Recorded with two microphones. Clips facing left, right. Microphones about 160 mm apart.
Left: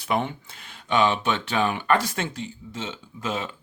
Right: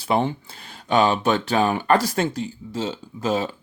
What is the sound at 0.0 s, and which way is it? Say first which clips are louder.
Speech: right 4 dB; 30° right (ahead or behind).